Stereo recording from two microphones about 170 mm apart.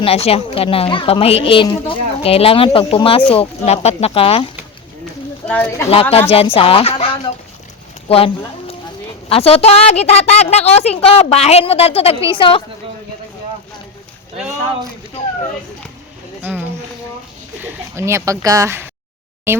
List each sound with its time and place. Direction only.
0.0 s speech: 35° left (ahead or behind)
5.5 s speech: 10° left (ahead or behind)
5.9 s speech: 35° left (ahead or behind)
16.4 s speech: 10° right (ahead or behind)